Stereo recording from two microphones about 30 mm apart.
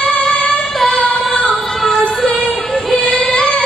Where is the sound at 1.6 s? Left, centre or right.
Centre.